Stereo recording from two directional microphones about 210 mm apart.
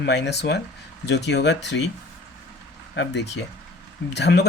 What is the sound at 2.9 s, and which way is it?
Speech, 55° left (ahead or behind).